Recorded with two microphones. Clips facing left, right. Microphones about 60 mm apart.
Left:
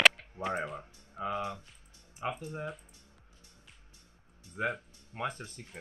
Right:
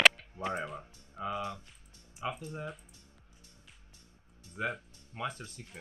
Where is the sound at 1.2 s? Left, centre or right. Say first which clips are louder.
Left 1 dB; left.